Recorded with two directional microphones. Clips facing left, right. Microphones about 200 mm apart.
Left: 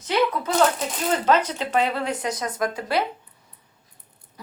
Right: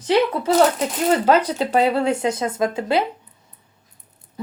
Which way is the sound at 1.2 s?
35° right (ahead or behind).